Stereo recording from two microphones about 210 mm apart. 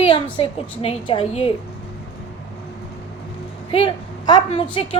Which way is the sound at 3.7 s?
20° left (ahead or behind).